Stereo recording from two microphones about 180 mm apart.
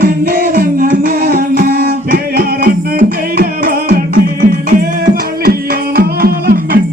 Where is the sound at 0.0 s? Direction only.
50° right (ahead or behind).